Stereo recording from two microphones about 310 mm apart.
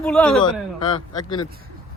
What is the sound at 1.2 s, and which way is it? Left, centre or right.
Speech, centre.